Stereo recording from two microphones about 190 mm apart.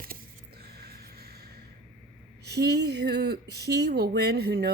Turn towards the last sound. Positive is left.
turn(degrees=-60)  # may be behind; listen again after turning